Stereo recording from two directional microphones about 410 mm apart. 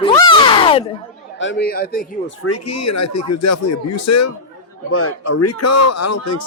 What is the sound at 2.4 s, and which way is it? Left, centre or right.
Speech, left.